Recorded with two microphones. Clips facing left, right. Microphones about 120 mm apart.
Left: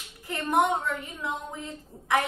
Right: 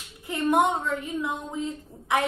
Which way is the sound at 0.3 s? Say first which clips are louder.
Right 2 dB; 20° right (ahead or behind).